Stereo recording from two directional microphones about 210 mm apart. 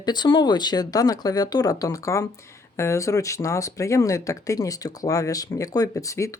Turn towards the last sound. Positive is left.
turn(degrees=15)  # may be behind; listen again after turning